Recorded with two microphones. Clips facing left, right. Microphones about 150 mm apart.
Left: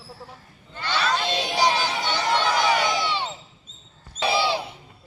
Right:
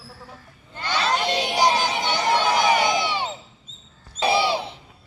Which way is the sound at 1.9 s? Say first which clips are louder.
Right 2 dB; 15° right (ahead or behind).